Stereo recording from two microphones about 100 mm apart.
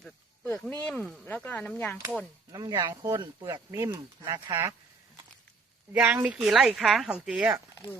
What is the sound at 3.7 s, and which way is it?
Speech, 30° right (ahead or behind).